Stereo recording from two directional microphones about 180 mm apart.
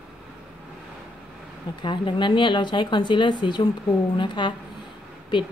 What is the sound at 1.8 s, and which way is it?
A woman's voice, 25° left (ahead or behind).